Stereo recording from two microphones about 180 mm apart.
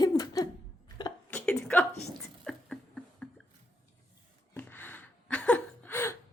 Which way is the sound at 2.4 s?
5° left (ahead or behind).